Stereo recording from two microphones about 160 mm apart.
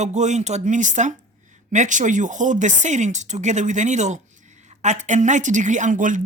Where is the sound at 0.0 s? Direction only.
45° right (ahead or behind).